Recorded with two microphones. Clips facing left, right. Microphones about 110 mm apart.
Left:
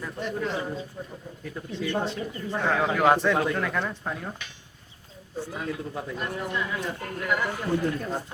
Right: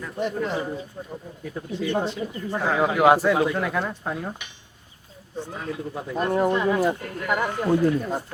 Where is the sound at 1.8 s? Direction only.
15° right (ahead or behind).